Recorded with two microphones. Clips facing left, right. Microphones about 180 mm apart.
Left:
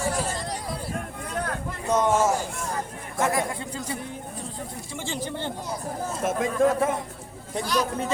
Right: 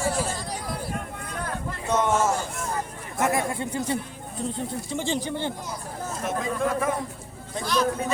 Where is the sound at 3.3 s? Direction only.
25° right (ahead or behind).